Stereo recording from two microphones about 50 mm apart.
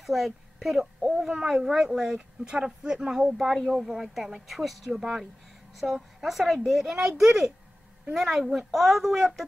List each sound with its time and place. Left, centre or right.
0.0 s a woman's voice: centre